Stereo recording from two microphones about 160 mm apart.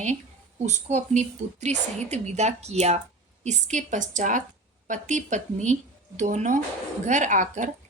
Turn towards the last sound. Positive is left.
turn(degrees=-50)  # may be behind; listen again after turning